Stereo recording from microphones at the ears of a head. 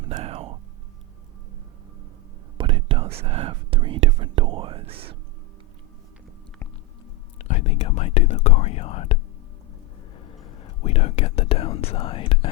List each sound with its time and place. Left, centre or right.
0.0 s music: right
2.6 s whispering: right
7.4 s whispering: left
10.2 s whispering: left